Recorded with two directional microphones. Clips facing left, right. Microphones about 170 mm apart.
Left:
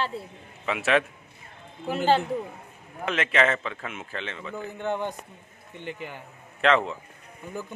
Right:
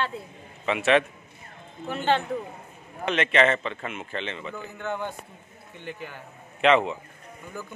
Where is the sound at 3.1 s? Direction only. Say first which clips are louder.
Right 2 dB; centre (ahead or behind).